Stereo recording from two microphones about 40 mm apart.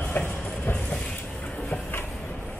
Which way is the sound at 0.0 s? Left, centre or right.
Left.